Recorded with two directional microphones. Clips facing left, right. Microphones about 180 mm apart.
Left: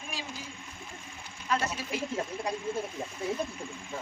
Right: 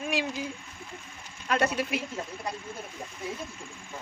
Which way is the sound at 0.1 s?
70° right (ahead or behind).